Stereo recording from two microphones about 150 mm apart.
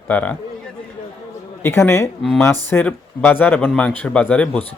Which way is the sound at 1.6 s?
15° left (ahead or behind).